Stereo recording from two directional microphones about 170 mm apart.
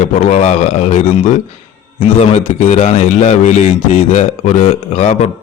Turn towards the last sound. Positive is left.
turn(degrees=45)  # may be behind; listen again after turning